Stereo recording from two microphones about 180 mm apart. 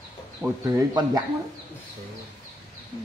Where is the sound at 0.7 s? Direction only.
20° right (ahead or behind).